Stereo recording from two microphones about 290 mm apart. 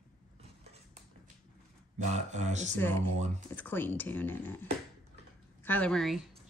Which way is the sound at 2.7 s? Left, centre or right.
Centre.